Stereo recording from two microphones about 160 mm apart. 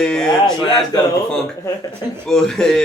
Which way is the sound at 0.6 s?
25° left (ahead or behind).